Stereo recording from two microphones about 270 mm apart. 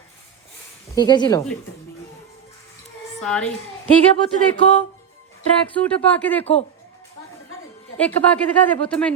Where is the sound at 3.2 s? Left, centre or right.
Centre.